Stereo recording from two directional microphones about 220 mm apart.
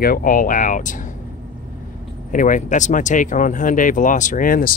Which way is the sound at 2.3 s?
35° left (ahead or behind).